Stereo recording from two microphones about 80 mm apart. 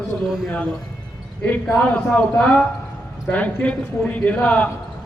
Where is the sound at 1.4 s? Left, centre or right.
Centre.